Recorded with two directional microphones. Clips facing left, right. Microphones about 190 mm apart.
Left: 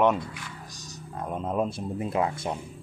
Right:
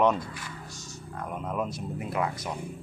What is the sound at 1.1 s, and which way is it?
Speech, 25° left (ahead or behind).